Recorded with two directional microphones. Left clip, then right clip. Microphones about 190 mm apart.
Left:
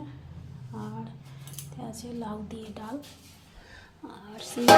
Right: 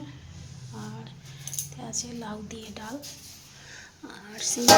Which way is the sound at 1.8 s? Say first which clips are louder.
Even; 5° left (ahead or behind).